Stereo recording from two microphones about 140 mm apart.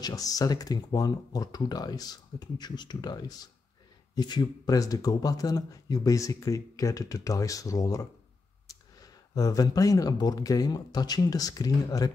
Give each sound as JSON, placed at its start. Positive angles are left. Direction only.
{"t": 0.0, "sound": "speech", "side_deg": 25}